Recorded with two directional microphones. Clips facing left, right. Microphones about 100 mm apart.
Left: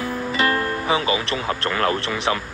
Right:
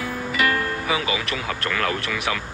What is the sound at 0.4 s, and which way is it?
Speech, 35° left (ahead or behind).